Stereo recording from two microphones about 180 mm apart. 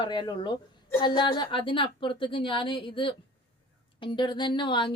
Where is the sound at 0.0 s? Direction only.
25° left (ahead or behind).